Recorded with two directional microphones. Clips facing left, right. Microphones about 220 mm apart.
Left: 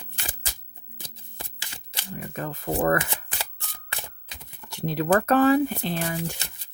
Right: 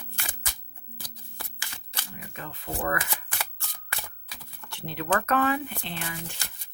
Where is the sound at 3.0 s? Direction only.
20° left (ahead or behind).